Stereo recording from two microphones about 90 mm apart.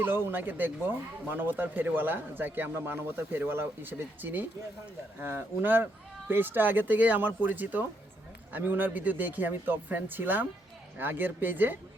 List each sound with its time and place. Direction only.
0.3 s speech: 20° right (ahead or behind)